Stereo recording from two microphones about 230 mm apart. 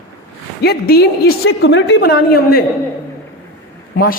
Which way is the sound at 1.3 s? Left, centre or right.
Left.